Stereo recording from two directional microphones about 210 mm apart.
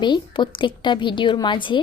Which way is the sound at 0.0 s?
20° left (ahead or behind).